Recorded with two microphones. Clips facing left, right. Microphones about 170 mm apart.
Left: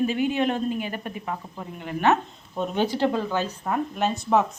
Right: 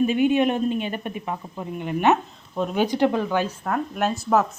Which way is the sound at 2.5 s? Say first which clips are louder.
Right 2 dB; centre (ahead or behind).